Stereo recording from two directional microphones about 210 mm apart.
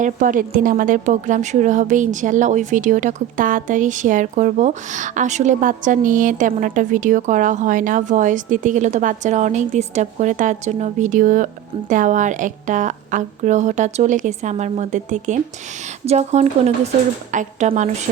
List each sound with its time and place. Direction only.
0.0 s a woman's voice: 40° right (ahead or behind)